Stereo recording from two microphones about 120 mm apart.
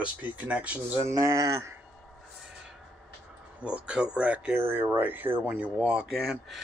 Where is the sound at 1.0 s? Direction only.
25° right (ahead or behind).